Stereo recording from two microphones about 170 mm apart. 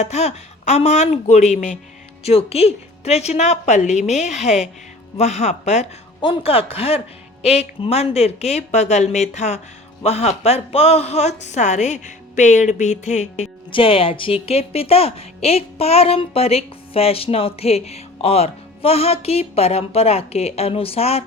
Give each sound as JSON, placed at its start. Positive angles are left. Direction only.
{"t": 0.0, "sound": "a woman's voice", "side_deg": 40}
{"t": 13.7, "sound": "a woman's voice", "side_deg": 30}